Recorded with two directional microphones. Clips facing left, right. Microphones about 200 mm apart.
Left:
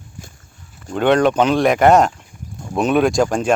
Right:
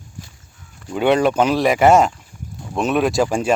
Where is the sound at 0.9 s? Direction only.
5° right (ahead or behind).